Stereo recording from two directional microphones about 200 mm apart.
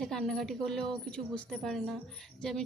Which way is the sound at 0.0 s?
Centre (ahead or behind).